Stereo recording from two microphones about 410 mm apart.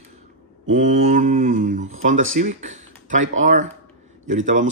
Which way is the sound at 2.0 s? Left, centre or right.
Right.